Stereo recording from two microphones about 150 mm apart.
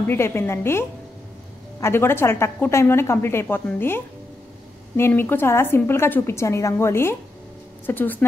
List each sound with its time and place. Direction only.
0.0 s a woman's voice: 15° left (ahead or behind)